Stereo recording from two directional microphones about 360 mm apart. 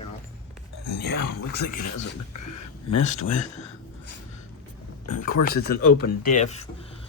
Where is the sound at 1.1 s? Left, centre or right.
Left.